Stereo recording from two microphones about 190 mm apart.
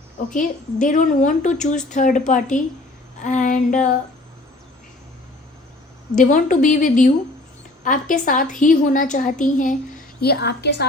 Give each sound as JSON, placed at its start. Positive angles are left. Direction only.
{"t": 0.3, "sound": "a woman's voice", "side_deg": 45}
{"t": 6.1, "sound": "a woman's voice", "side_deg": 40}
{"t": 10.2, "sound": "a woman's voice", "side_deg": 60}